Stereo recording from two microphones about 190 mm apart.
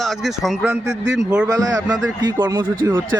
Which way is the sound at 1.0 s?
70° right (ahead or behind).